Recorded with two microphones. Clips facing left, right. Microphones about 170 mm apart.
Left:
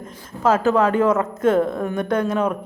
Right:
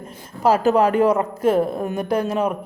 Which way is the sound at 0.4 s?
15° right (ahead or behind).